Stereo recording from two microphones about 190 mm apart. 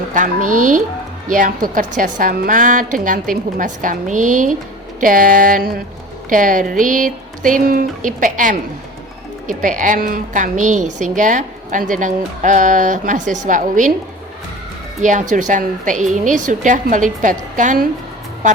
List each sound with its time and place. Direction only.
0.1 s a woman's voice: 45° right (ahead or behind)
15.0 s a woman's voice: 40° right (ahead or behind)